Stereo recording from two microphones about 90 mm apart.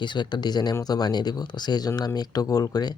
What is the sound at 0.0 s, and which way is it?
Speech, 60° left (ahead or behind).